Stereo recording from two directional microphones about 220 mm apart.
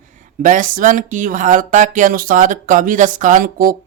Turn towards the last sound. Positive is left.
turn(degrees=-40)  # may be behind; listen again after turning